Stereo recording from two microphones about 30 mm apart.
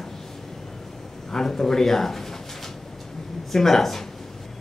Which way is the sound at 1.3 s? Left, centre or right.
Left.